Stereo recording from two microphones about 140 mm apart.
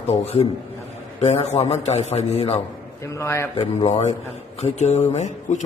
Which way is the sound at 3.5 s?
45° left (ahead or behind).